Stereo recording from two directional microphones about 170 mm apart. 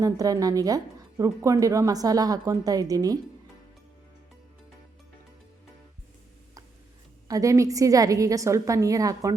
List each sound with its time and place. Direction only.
0.0 s speech: 20° right (ahead or behind)
7.3 s speech: 20° right (ahead or behind)